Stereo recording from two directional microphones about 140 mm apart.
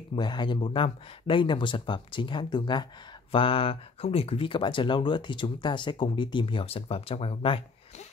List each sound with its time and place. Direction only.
0.1 s speech: 35° left (ahead or behind)